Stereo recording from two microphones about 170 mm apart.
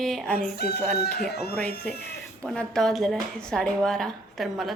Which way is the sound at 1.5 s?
10° left (ahead or behind).